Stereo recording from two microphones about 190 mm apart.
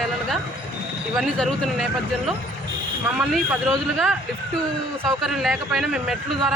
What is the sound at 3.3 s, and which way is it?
A man's voice, centre (ahead or behind).